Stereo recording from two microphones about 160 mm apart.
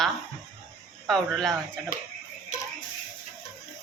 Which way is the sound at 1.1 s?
Centre (ahead or behind).